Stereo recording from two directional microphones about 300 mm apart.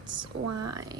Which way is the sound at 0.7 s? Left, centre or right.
Centre.